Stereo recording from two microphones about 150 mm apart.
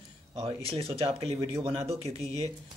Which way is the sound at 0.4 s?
40° right (ahead or behind).